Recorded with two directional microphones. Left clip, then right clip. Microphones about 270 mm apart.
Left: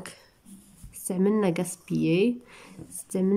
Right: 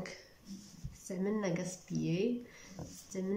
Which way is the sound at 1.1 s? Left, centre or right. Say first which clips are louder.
Left 11 dB; left.